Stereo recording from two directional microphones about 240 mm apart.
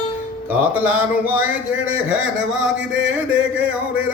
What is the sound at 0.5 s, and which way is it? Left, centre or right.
A man's voice, centre.